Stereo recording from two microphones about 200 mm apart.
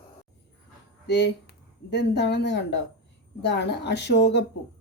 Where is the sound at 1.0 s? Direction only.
60° left (ahead or behind).